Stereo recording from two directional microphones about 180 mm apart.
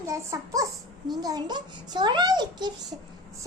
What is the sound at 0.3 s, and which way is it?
A child's voice, 20° right (ahead or behind).